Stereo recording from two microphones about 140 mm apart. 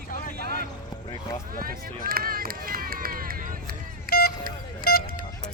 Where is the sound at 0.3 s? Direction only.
90° right.